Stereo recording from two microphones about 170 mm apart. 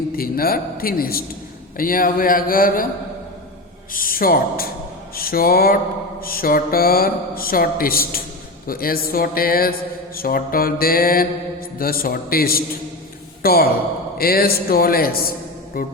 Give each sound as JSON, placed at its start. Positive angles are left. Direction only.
{"t": 0.2, "sound": "speech", "side_deg": 60}
{"t": 3.9, "sound": "a man's voice", "side_deg": 55}